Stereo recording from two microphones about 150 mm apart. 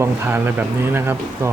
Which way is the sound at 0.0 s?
15° right (ahead or behind).